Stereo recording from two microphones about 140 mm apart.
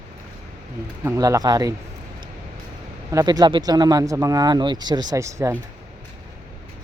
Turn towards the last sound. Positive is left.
turn(degrees=-20)  # may be behind; listen again after turning